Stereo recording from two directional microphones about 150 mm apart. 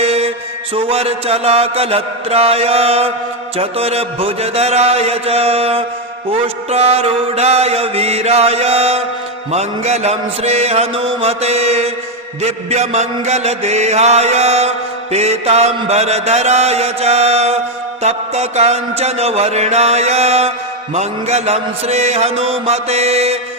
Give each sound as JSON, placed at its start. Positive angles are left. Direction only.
{"t": 0.0, "sound": "mantra", "side_deg": -40}